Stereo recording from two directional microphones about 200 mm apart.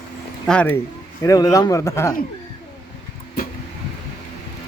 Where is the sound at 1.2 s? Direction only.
15° left (ahead or behind).